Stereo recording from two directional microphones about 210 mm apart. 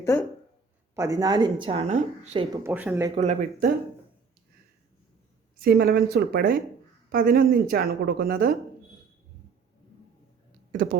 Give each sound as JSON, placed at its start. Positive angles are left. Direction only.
{"t": 0.0, "sound": "speech", "side_deg": 10}
{"t": 0.9, "sound": "a woman's voice", "side_deg": -15}
{"t": 2.6, "sound": "speech", "side_deg": -10}
{"t": 3.2, "sound": "speech", "side_deg": -40}
{"t": 5.5, "sound": "a woman's voice", "side_deg": -50}
{"t": 10.7, "sound": "speech", "side_deg": -40}